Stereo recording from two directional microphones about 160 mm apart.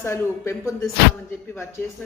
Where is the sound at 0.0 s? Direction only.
15° left (ahead or behind).